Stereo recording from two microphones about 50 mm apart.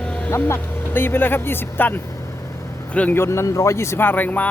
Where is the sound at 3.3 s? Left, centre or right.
Left.